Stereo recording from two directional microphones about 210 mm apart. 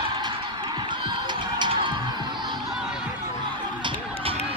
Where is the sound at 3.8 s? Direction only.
25° right (ahead or behind).